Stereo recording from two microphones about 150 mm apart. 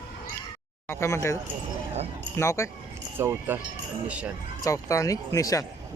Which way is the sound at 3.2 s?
15° right (ahead or behind).